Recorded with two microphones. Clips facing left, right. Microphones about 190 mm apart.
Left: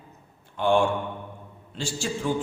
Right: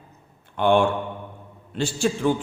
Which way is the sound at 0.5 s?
60° right (ahead or behind).